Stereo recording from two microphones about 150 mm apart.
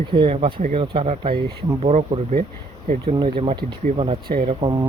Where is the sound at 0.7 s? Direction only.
40° right (ahead or behind).